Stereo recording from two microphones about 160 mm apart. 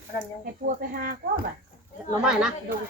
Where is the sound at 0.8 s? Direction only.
65° right (ahead or behind).